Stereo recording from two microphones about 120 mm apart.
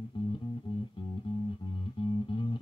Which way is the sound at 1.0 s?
45° left (ahead or behind).